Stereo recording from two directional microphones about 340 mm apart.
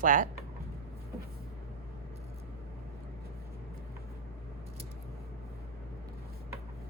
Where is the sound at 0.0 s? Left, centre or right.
Right.